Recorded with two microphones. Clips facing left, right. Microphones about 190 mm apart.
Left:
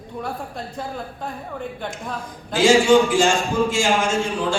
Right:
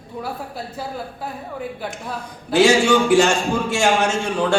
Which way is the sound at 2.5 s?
70° right (ahead or behind).